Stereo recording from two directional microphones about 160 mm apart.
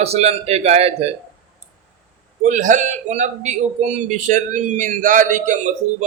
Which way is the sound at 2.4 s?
50° right (ahead or behind).